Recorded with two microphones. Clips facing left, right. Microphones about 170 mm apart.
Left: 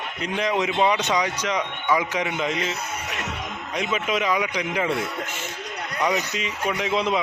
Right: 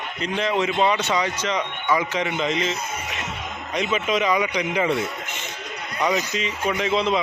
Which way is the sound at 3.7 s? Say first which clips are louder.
Right 2 dB; 10° left (ahead or behind).